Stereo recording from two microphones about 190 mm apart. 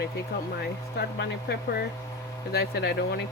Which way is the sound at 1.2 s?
60° left (ahead or behind).